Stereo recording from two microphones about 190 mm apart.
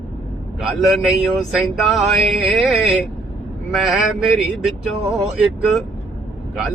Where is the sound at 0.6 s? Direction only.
Centre (ahead or behind).